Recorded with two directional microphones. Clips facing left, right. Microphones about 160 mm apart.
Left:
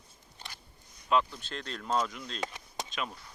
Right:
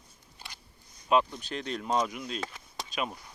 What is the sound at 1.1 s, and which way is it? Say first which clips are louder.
Speech: right 3 dB; 20° right (ahead or behind).